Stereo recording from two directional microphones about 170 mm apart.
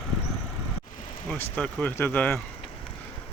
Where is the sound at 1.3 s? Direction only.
5° left (ahead or behind).